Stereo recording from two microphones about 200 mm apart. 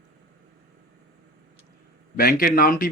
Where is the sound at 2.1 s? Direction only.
50° left (ahead or behind).